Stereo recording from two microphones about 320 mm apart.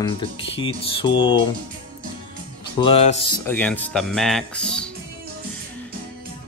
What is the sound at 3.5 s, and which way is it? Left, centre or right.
Speech, centre.